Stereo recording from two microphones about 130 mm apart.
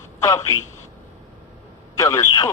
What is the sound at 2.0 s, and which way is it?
Speech, 25° left (ahead or behind).